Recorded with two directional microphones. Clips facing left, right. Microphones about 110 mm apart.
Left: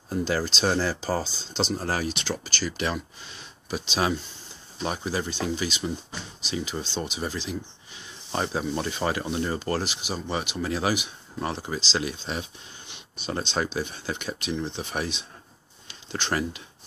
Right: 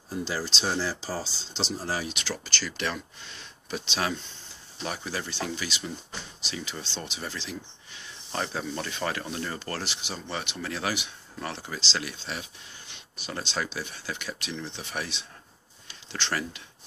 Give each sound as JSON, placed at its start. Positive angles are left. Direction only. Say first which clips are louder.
{"t": 0.1, "sound": "speech", "louder": "left 5 dB", "side_deg": 50}
{"t": 2.2, "sound": "speech", "louder": "left 4 dB", "side_deg": 15}